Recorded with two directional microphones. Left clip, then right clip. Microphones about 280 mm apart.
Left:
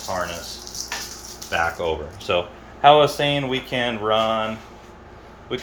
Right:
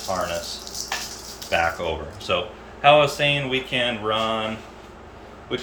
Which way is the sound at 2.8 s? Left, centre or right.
Centre.